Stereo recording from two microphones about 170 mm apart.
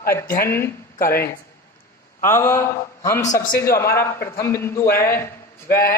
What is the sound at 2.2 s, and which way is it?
A man's voice, 15° left (ahead or behind).